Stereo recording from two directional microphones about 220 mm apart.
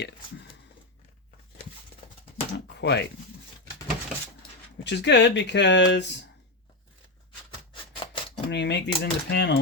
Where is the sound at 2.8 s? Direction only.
50° left (ahead or behind).